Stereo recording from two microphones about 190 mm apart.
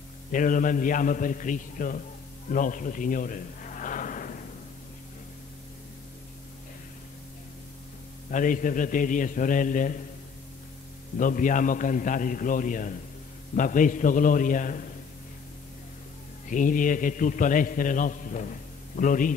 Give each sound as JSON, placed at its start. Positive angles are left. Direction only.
{"t": 0.3, "sound": "a man's voice", "side_deg": 45}
{"t": 2.5, "sound": "a sound", "side_deg": 45}
{"t": 8.3, "sound": "a man's voice", "side_deg": 45}
{"t": 11.1, "sound": "a man's voice", "side_deg": 45}
{"t": 16.4, "sound": "a man's voice", "side_deg": 45}